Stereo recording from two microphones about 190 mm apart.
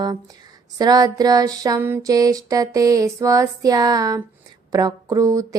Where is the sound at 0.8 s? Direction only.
20° right (ahead or behind).